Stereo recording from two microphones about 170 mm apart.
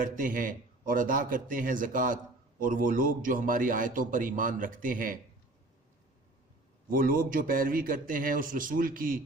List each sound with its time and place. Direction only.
0.0 s a man's voice: 55° right (ahead or behind)
6.9 s a man's voice: 55° right (ahead or behind)